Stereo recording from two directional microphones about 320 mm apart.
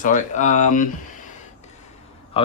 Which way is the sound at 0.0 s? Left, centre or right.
Left.